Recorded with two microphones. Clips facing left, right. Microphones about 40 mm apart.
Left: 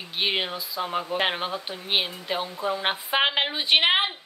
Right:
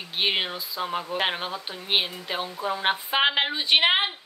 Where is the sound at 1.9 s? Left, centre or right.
Centre.